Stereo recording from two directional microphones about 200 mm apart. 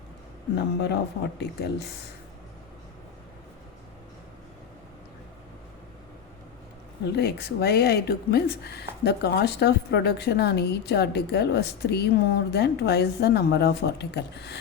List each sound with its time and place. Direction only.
0.5 s speech: 55° left (ahead or behind)
7.1 s speech: 55° left (ahead or behind)